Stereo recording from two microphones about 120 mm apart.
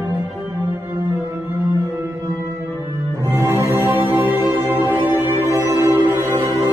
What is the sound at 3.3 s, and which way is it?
Music, 25° right (ahead or behind).